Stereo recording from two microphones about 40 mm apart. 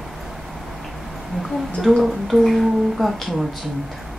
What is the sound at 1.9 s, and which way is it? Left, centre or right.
Speech, centre.